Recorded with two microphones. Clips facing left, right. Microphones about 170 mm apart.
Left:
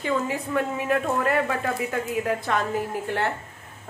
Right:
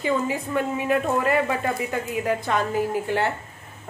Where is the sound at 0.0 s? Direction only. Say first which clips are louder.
Right 2 dB; 5° right (ahead or behind).